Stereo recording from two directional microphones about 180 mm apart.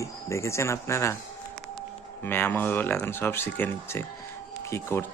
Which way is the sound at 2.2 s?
10° left (ahead or behind).